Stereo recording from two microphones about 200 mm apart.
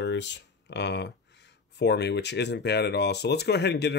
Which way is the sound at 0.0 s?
60° left (ahead or behind).